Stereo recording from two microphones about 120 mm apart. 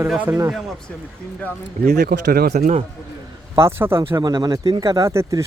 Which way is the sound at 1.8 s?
90° right.